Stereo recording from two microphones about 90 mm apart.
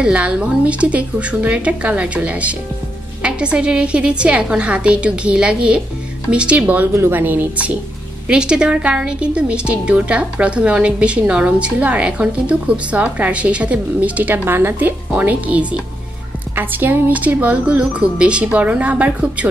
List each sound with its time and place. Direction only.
0.0 s a woman's voice: 10° right (ahead or behind)